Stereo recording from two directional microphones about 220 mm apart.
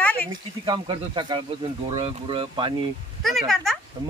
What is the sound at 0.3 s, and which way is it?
Speech, 20° right (ahead or behind).